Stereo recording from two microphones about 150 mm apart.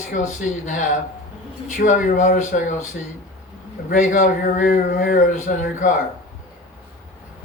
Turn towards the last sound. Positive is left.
turn(degrees=60)  # may be behind; listen again after turning